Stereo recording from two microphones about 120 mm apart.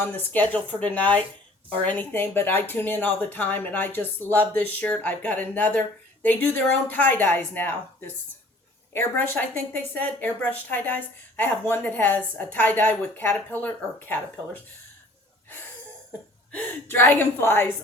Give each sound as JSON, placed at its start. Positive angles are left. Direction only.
{"t": 0.5, "sound": "a woman's voice", "side_deg": 10}
{"t": 16.5, "sound": "a woman's voice", "side_deg": 15}